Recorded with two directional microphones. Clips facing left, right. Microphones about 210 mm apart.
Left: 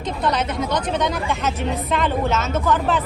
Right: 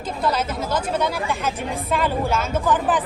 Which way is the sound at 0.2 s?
5° right (ahead or behind).